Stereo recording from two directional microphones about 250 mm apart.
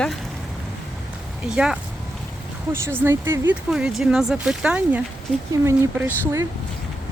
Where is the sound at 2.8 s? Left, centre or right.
Centre.